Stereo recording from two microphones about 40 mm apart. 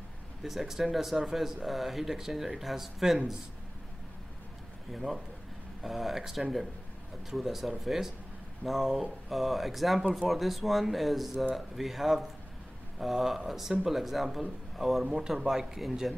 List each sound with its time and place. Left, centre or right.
0.4 s speech: centre
4.9 s speech: centre